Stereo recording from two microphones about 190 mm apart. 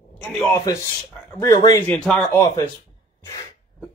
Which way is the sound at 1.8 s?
5° left (ahead or behind).